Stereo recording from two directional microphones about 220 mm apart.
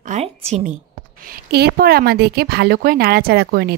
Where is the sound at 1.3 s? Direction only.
45° right (ahead or behind).